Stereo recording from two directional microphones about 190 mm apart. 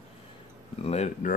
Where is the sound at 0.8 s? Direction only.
35° left (ahead or behind).